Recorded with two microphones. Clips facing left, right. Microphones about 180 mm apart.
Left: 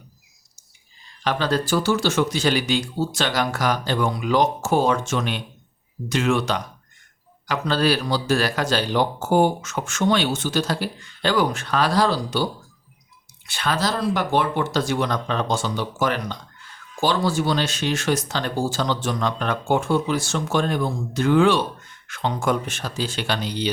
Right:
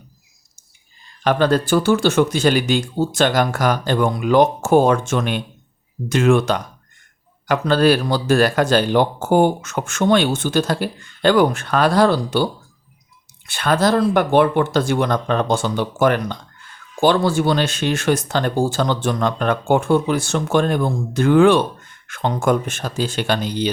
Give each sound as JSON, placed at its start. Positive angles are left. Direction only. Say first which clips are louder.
{"t": 1.2, "sound": "speech", "louder": "right 6 dB", "side_deg": -50}
{"t": 13.5, "sound": "speech", "louder": "right 7 dB", "side_deg": -50}